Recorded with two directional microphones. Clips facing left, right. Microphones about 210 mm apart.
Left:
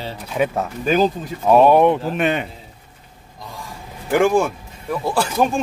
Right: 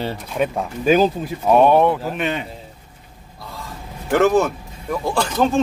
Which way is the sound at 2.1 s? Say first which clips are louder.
Left 3 dB; 55° left (ahead or behind).